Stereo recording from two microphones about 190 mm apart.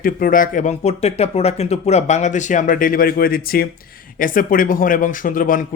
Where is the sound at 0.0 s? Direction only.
50° left (ahead or behind).